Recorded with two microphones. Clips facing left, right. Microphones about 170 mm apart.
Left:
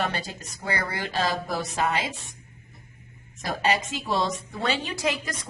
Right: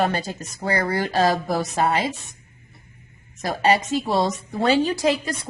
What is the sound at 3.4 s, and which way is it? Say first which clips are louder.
Speech: right 6 dB; 35° right (ahead or behind).